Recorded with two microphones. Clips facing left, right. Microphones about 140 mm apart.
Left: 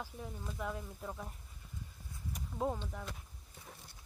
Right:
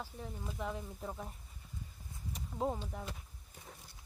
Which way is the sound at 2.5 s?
10° right (ahead or behind).